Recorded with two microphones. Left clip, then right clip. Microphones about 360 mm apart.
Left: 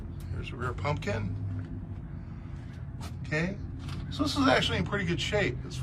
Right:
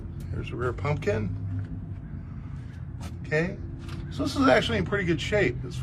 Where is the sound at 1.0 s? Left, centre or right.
Centre.